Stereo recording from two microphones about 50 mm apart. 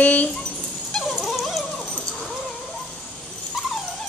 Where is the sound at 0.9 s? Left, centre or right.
Centre.